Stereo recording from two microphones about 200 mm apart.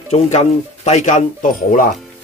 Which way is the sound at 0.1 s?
30° left (ahead or behind).